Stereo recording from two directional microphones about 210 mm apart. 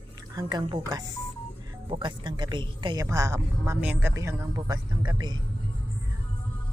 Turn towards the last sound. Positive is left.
turn(degrees=-20)  # may be behind; listen again after turning